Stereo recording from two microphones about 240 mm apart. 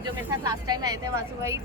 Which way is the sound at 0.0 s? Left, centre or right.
Centre.